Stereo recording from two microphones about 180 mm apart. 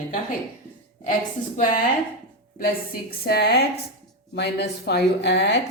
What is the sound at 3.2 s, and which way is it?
A woman's voice, 60° left (ahead or behind).